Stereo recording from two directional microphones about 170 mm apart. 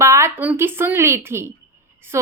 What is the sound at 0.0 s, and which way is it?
A woman's voice, 15° right (ahead or behind).